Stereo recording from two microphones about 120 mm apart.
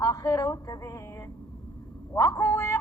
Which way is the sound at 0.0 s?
30° left (ahead or behind).